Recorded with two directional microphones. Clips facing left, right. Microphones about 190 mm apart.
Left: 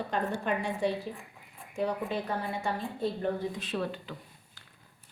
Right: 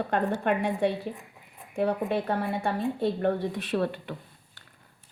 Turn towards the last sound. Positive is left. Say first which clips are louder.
# right 6 dB
turn(degrees=-60)  # may be behind; listen again after turning